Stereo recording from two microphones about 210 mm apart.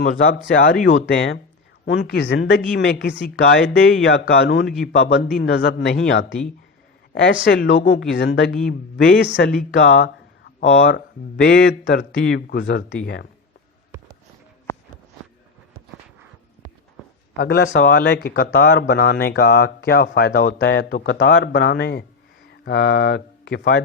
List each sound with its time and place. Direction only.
0.0 s speech: 40° left (ahead or behind)
0.9 s speech: 60° left (ahead or behind)
10.6 s speech: 30° left (ahead or behind)
11.4 s speech: 50° left (ahead or behind)
17.3 s speech: 50° left (ahead or behind)